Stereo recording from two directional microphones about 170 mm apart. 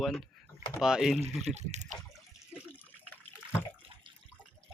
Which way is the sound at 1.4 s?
40° right (ahead or behind).